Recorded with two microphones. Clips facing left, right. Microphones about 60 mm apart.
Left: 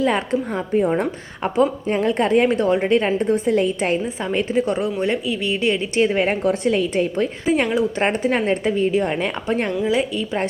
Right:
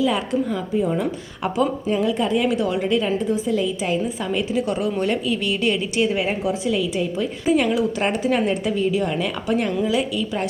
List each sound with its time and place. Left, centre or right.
0.0 s a woman's voice: left
1.4 s a woman's voice: left
3.2 s a woman's voice: left
4.3 s a woman's voice: left
4.9 s a woman's voice: centre
6.1 s a woman's voice: left
7.5 s a woman's voice: left